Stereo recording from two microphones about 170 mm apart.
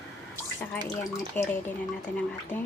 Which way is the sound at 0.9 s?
15° left (ahead or behind).